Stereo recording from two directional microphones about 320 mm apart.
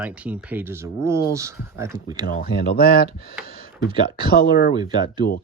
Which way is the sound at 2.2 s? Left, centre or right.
Left.